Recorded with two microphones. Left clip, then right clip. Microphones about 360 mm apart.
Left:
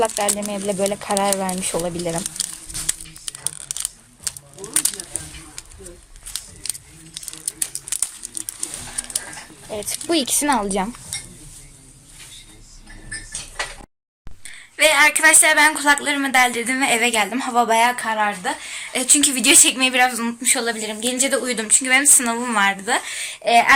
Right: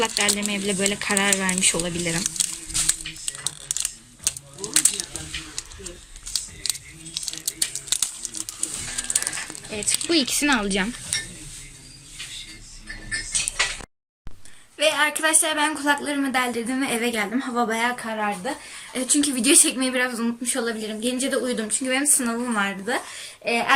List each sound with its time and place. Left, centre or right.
0.0 s speech: centre
3.2 s a sound: centre
7.4 s crumpling: centre
9.7 s speech: left
14.8 s a woman's voice: centre